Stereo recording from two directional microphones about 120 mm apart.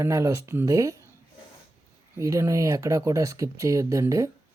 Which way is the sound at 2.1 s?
25° right (ahead or behind).